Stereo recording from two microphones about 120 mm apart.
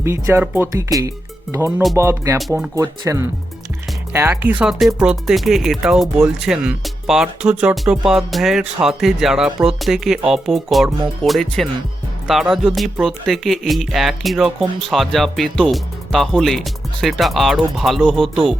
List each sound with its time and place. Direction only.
0.0 s speech: 20° right (ahead or behind); by 18.4 s 5° left (ahead or behind)